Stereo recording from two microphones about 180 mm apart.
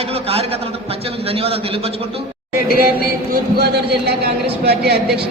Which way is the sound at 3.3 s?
65° right (ahead or behind).